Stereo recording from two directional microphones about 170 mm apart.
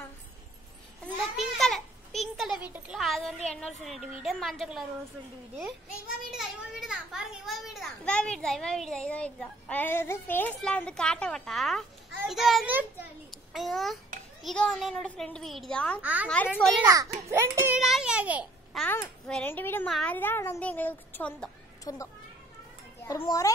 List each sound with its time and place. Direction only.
1.4 s a sound: centre (ahead or behind)
3.6 s a child's voice: centre (ahead or behind)
6.3 s a child's voice: 5° right (ahead or behind)
16.0 s a child's voice: 10° right (ahead or behind)
16.3 s speech: 10° left (ahead or behind)
16.8 s a child's voice: 20° right (ahead or behind)
17.7 s a child's voice: centre (ahead or behind)
18.7 s a child's voice: 5° left (ahead or behind)
23.2 s a child's voice: 20° left (ahead or behind)